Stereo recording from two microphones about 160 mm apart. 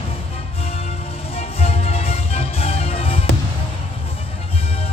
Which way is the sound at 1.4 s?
40° left (ahead or behind).